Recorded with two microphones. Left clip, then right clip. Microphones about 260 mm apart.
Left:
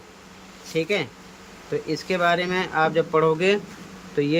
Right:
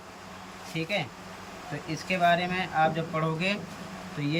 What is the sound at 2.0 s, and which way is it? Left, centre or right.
Speech, centre.